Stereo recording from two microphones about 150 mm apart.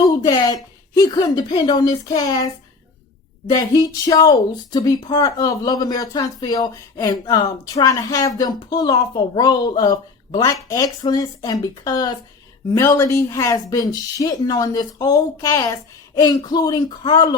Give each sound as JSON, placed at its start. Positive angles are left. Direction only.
{"t": 0.2, "sound": "speech", "side_deg": 25}